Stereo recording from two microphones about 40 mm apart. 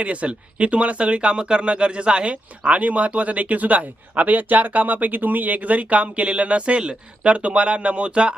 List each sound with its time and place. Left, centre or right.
0.0 s speech: right
2.3 s speech: right